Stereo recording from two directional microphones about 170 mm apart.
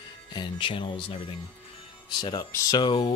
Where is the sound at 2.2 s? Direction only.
20° left (ahead or behind).